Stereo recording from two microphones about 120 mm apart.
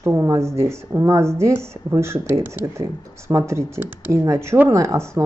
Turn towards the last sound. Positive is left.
turn(degrees=-25)  # may be behind; listen again after turning